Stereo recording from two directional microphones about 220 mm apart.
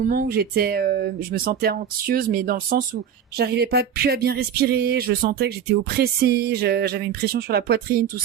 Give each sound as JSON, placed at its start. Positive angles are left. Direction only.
{"t": 0.0, "sound": "speech", "side_deg": -40}